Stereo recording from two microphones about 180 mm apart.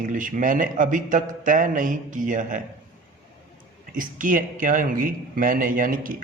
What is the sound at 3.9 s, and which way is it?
A man's voice, 50° right (ahead or behind).